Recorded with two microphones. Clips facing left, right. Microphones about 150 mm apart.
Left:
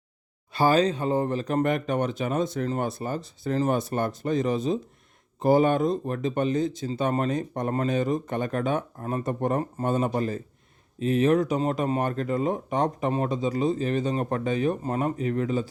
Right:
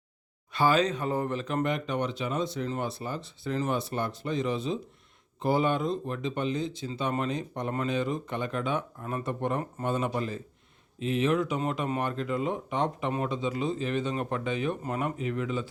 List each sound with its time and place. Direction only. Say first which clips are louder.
0.5 s speech: left 3 dB; 40° left (ahead or behind)